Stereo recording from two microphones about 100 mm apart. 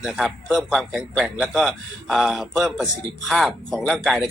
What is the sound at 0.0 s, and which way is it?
A man's voice, centre (ahead or behind).